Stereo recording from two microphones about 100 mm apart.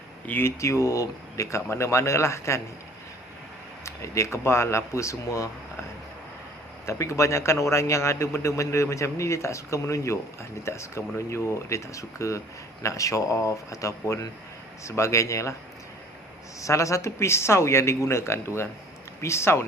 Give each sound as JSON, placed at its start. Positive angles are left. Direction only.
{"t": 0.3, "sound": "a man's voice", "side_deg": 25}
{"t": 3.8, "sound": "a man's voice", "side_deg": 30}
{"t": 6.8, "sound": "a man's voice", "side_deg": 30}
{"t": 16.6, "sound": "a man's voice", "side_deg": 30}